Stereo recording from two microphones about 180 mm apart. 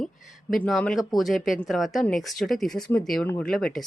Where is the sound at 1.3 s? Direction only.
50° left (ahead or behind).